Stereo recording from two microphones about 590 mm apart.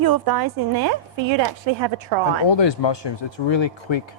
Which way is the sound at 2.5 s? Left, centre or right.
Left.